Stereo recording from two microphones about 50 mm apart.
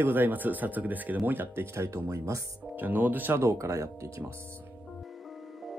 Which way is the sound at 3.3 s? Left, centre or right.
Right.